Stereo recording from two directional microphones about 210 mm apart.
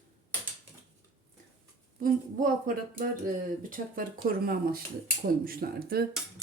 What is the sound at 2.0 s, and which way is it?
A woman's voice, 40° right (ahead or behind).